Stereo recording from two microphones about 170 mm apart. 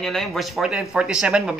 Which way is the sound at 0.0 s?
Centre (ahead or behind).